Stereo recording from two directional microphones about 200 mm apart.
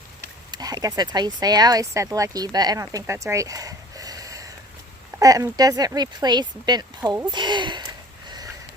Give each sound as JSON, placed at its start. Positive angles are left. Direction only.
{"t": 0.5, "sound": "speech", "side_deg": -20}